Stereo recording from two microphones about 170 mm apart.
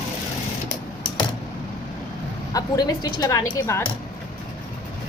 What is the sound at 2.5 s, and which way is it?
A woman's voice, 20° left (ahead or behind).